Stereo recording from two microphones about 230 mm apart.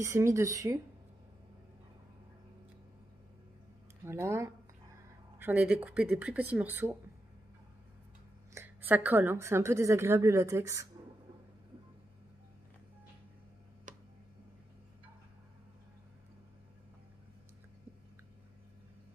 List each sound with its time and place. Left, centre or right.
0.0 s a woman's voice: centre
4.0 s a woman's voice: centre
8.5 s a woman's voice: centre
13.9 s tick-tock: right